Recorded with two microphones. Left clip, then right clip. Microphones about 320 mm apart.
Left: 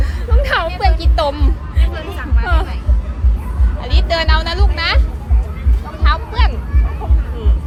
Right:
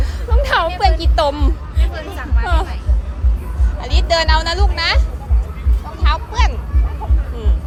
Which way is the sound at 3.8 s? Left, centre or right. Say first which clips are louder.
Right 2 dB; centre.